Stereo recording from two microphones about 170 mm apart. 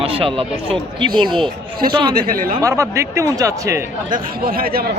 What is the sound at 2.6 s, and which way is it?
Speech, 20° right (ahead or behind).